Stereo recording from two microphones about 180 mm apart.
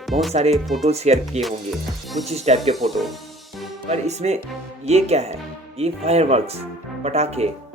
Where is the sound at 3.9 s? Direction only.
40° right (ahead or behind).